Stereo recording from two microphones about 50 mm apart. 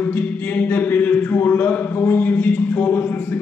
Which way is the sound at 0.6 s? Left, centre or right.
Left.